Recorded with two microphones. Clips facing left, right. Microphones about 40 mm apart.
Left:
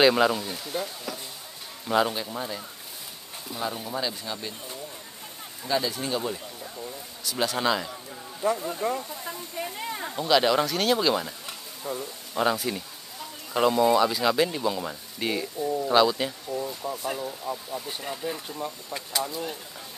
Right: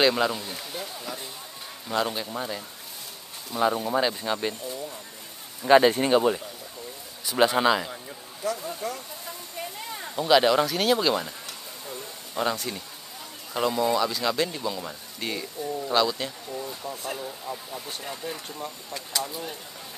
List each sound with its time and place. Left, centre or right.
0.0 s speech: centre
3.5 s speech: right
5.7 s a man's voice: right; by 8.0 s centre
8.5 s speech: centre
8.8 s speech: left
9.6 s a sound: centre
10.1 s speech: centre